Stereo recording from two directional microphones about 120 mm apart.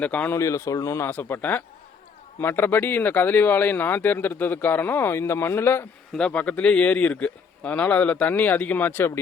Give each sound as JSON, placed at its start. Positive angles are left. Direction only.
{"t": 0.0, "sound": "speech", "side_deg": 10}
{"t": 0.3, "sound": "speech", "side_deg": 25}
{"t": 6.1, "sound": "speech", "side_deg": 10}